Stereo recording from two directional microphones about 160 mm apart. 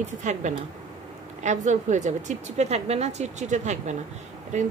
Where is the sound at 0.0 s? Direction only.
50° right (ahead or behind).